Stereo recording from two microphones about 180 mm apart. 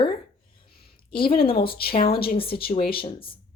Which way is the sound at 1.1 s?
30° left (ahead or behind).